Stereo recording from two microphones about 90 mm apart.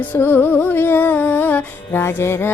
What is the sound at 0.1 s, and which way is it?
Music, 25° left (ahead or behind).